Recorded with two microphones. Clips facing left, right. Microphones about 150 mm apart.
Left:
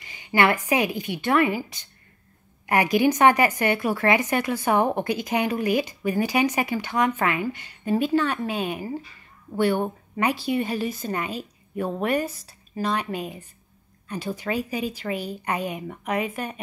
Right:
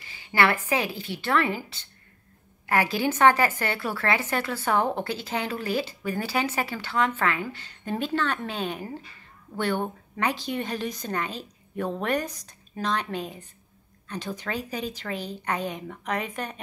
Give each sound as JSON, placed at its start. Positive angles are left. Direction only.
{"t": 0.0, "sound": "a woman's voice", "side_deg": 20}